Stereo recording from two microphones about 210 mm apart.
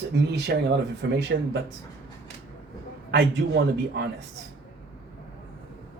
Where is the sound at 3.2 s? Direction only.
55° right (ahead or behind).